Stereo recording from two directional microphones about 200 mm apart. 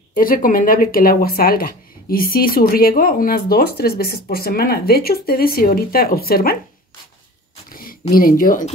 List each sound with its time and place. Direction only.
0.1 s speech: 45° left (ahead or behind)
8.1 s speech: 45° left (ahead or behind)